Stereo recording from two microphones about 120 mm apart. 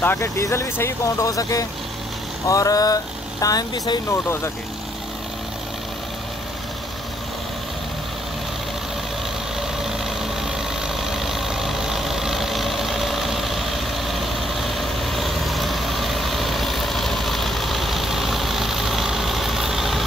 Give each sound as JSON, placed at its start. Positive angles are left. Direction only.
{"t": 0.0, "sound": "speech", "side_deg": 20}
{"t": 11.0, "sound": "vehicle", "side_deg": 0}